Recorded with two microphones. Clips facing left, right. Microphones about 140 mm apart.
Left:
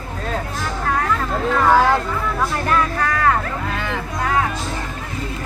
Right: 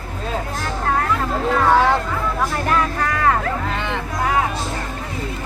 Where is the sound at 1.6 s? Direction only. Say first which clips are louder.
Left 1 dB; centre (ahead or behind).